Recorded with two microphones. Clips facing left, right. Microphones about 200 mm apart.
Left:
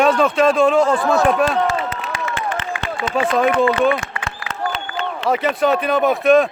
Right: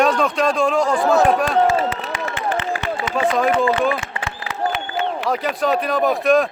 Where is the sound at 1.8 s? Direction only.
35° right (ahead or behind).